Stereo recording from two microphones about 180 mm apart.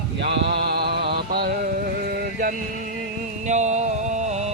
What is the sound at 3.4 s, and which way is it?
Music, 40° right (ahead or behind).